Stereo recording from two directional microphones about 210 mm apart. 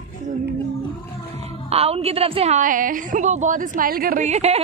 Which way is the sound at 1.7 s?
30° right (ahead or behind).